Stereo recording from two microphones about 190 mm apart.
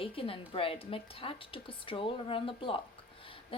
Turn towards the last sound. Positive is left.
turn(degrees=30)  # may be behind; listen again after turning